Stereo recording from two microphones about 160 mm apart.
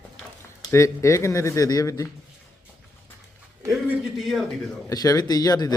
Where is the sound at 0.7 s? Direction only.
15° left (ahead or behind).